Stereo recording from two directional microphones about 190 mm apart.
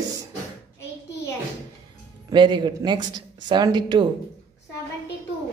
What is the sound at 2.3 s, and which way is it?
Speech, 25° right (ahead or behind).